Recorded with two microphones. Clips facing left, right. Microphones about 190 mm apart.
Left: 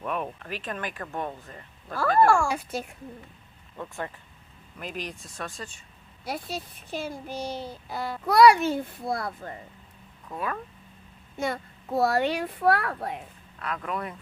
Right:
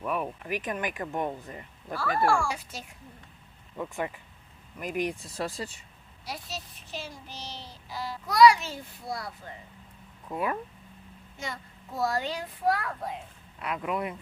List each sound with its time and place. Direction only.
0.0 s speech: 5° right (ahead or behind)
2.0 s speech: 45° left (ahead or behind)
3.8 s speech: 15° right (ahead or behind)
5.4 s speech: 30° right (ahead or behind)
6.2 s speech: 55° left (ahead or behind)
10.2 s speech: 15° right (ahead or behind)
11.3 s speech: 60° left (ahead or behind)
13.6 s speech: 15° right (ahead or behind)
13.9 s speech: 5° right (ahead or behind)